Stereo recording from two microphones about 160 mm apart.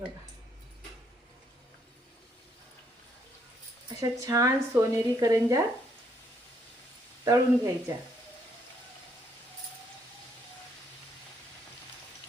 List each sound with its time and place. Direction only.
4.0 s a woman's voice: 20° right (ahead or behind)
7.3 s a woman's voice: 20° right (ahead or behind)